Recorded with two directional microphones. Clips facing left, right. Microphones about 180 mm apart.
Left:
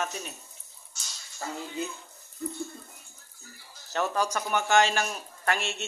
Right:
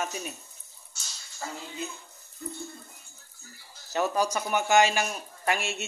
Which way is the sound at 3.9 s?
10° right (ahead or behind).